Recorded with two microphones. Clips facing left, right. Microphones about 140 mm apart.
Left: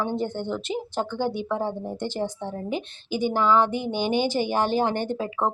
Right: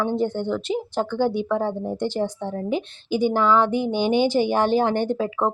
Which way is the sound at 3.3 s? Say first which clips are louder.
Even; 10° left (ahead or behind).